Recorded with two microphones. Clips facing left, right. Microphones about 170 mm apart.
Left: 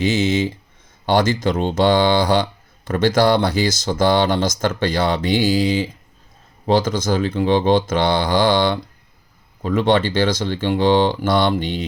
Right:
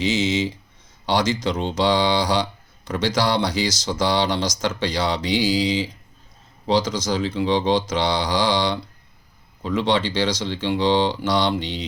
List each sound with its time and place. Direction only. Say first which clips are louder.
0.0 s speech: left 3 dB; 55° left (ahead or behind)